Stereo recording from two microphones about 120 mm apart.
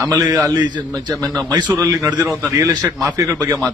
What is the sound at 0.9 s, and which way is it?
A man's voice, 30° right (ahead or behind).